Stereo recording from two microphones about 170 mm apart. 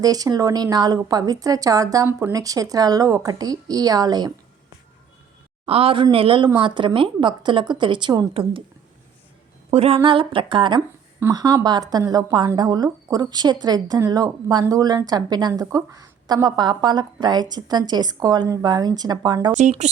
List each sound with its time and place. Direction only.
0.0 s speech: 20° right (ahead or behind)
5.6 s speech: 35° right (ahead or behind)
9.6 s speech: 35° right (ahead or behind)